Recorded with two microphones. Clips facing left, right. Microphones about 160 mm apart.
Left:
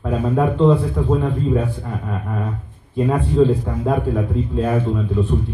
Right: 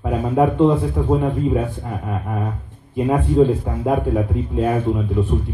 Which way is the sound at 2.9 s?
15° right (ahead or behind).